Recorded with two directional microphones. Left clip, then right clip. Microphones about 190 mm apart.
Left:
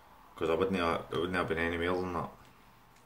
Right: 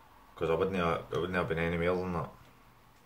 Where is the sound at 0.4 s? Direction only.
20° left (ahead or behind).